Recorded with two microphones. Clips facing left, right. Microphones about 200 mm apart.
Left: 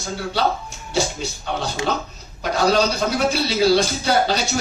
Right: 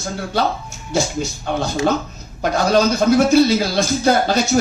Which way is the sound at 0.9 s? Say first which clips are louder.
Right 3 dB; 50° right (ahead or behind).